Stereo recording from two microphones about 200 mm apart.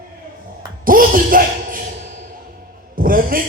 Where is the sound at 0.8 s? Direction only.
45° right (ahead or behind).